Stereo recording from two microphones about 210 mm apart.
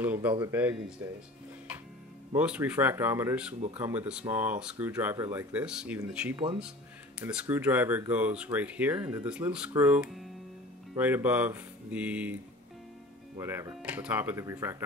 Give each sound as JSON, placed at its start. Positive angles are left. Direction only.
{"t": 0.0, "sound": "speech", "side_deg": -10}
{"t": 2.3, "sound": "speech", "side_deg": -5}
{"t": 6.3, "sound": "speech", "side_deg": -25}
{"t": 7.2, "sound": "speech", "side_deg": -5}
{"t": 13.4, "sound": "speech", "side_deg": -10}